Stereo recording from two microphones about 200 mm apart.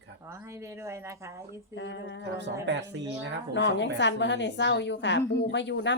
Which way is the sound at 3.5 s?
60° left (ahead or behind).